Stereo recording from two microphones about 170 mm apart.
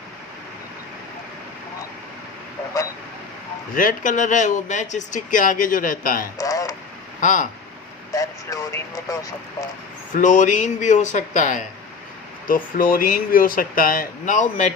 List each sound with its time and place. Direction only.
3.8 s speech: 50° left (ahead or behind)
6.4 s a sound: 20° left (ahead or behind)
7.2 s speech: 50° left (ahead or behind)
8.1 s speech: 20° left (ahead or behind)
10.1 s speech: 50° left (ahead or behind)